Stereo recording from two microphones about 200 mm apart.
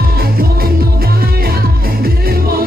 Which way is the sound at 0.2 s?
50° right (ahead or behind).